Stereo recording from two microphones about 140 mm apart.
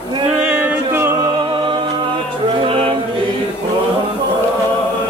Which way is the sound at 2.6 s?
40° right (ahead or behind).